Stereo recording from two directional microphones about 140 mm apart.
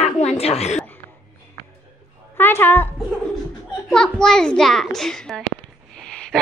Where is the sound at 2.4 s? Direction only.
15° left (ahead or behind).